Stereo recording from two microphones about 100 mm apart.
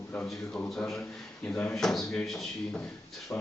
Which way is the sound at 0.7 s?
5° left (ahead or behind).